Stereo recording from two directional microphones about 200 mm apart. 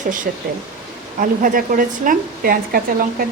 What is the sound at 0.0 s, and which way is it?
A woman's voice, 40° right (ahead or behind).